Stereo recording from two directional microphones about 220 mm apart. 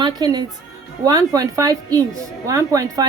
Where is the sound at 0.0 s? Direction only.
20° right (ahead or behind).